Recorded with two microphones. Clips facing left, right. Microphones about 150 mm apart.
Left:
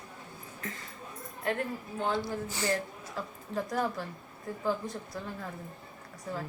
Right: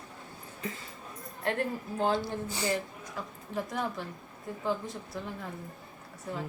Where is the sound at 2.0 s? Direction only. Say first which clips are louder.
Right 3 dB; 30° right (ahead or behind).